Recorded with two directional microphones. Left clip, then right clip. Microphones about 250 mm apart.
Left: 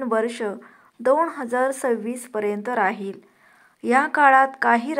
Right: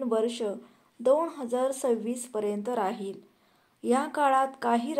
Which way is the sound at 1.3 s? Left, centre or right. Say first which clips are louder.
Left 6 dB; centre.